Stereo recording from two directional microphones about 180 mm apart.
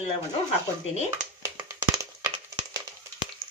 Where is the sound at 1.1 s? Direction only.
15° right (ahead or behind).